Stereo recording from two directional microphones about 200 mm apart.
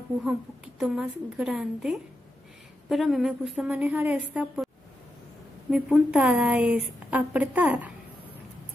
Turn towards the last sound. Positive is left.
turn(degrees=-5)  # may be behind; listen again after turning